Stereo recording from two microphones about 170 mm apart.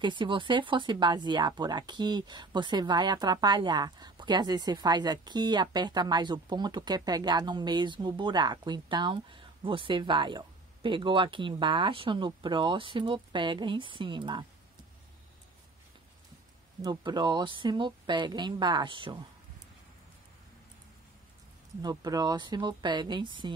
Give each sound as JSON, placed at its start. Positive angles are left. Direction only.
{"t": 0.0, "sound": "speech", "side_deg": -30}
{"t": 16.8, "sound": "speech", "side_deg": -25}
{"t": 21.8, "sound": "speech", "side_deg": -20}